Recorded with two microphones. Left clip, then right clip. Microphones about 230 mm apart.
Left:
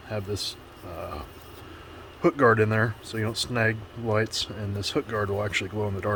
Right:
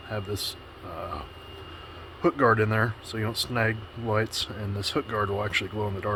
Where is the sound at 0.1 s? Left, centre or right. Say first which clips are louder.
Left 1 dB; centre.